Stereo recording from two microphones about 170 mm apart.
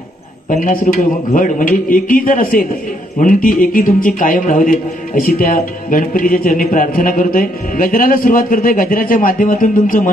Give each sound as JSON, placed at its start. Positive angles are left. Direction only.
{"t": 0.5, "sound": "a man's voice", "side_deg": 55}